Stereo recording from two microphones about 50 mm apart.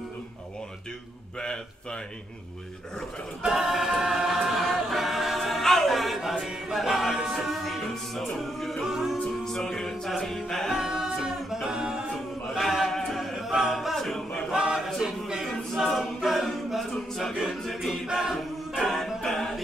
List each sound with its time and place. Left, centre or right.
1.4 s a sound: centre
3.4 s choir: centre
6.4 s music: centre
9.4 s music: centre
10.8 s a capella: centre
12.5 s chant: centre
13.7 s a capella: centre
14.5 s a capella: centre
14.9 s a capella: centre
17.4 s music: centre
18.1 s a capella: centre
18.8 s music: centre